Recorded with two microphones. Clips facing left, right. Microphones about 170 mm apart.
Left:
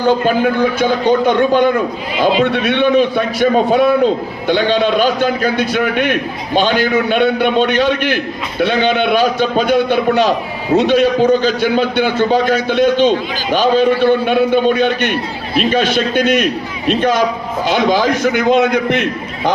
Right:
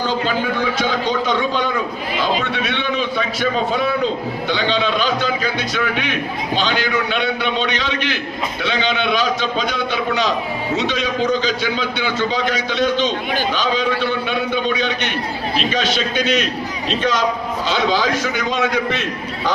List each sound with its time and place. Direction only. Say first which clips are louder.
1.4 s a man's voice: left 8 dB; 55° left (ahead or behind)
17.0 s a man's voice: left 3 dB; 10° left (ahead or behind)
18.2 s a man's voice: left 9 dB; 60° left (ahead or behind)